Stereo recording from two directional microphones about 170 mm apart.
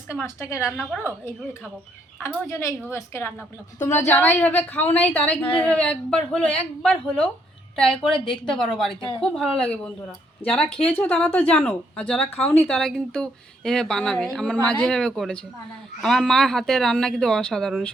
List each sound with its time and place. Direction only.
0.1 s a woman's voice: 15° left (ahead or behind)